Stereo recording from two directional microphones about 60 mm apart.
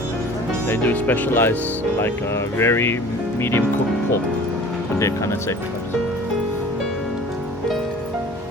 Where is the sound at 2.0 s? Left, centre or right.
Left.